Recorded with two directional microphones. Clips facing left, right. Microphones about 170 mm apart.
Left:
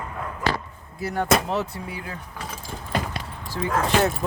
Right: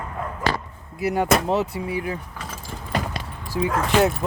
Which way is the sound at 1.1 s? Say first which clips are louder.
Right 2 dB; 15° right (ahead or behind).